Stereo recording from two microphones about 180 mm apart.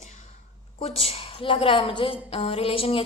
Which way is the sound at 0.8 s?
35° left (ahead or behind).